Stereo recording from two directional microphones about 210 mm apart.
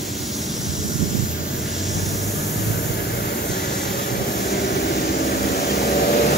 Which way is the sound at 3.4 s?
50° left (ahead or behind).